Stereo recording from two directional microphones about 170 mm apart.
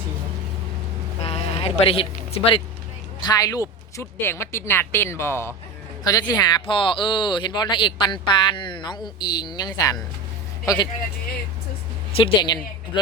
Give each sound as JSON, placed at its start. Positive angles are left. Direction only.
{"t": 1.2, "sound": "a sound", "side_deg": 35}
{"t": 3.2, "sound": "speech", "side_deg": 20}
{"t": 12.1, "sound": "speech", "side_deg": 30}